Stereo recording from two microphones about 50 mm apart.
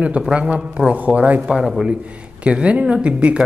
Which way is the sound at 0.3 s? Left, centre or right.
Right.